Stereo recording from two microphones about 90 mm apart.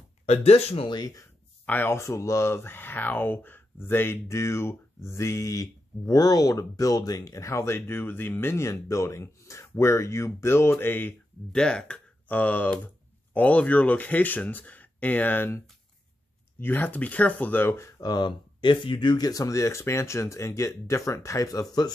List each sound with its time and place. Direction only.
0.9 s speech: 45° left (ahead or behind)
1.7 s speech: 20° left (ahead or behind)
2.0 s speech: 35° left (ahead or behind)
11.5 s speech: 10° left (ahead or behind); by 18.0 s 30° left (ahead or behind)
18.0 s speech: 55° left (ahead or behind)